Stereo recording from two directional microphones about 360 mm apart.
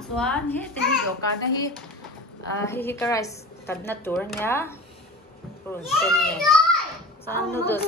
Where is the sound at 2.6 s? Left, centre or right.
Centre.